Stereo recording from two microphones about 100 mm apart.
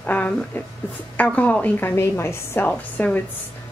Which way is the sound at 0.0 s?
15° left (ahead or behind).